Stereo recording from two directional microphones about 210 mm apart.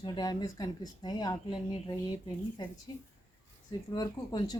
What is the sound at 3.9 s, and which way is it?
Speech, 20° left (ahead or behind).